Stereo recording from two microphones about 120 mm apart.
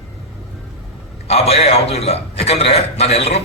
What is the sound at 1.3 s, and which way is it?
A man's voice, 60° left (ahead or behind).